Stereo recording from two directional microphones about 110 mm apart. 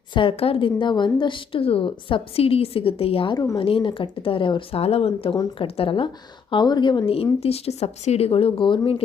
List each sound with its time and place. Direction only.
0.1 s a woman's voice: 50° left (ahead or behind)
3.3 s a woman's voice: 30° left (ahead or behind)
3.6 s a woman's voice: 55° left (ahead or behind)
4.8 s speech: 65° left (ahead or behind)
6.5 s a woman's voice: 40° left (ahead or behind)
7.1 s speech: 60° left (ahead or behind)